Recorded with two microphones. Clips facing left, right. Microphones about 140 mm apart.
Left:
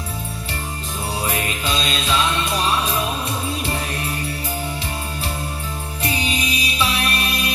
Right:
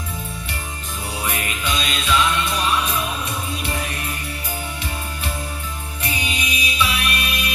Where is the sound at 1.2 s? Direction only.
35° left (ahead or behind).